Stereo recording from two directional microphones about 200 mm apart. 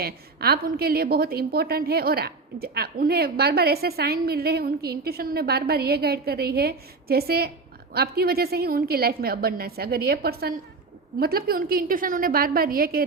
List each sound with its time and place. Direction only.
0.0 s a woman's voice: 50° right (ahead or behind)